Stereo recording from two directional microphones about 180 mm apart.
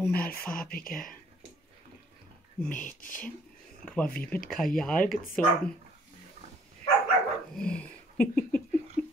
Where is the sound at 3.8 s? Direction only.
5° left (ahead or behind).